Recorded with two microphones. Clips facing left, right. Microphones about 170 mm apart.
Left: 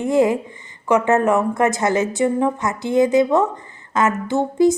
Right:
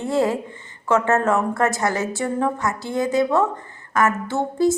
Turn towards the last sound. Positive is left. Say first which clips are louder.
# left 4 dB
turn(degrees=15)  # may be behind; listen again after turning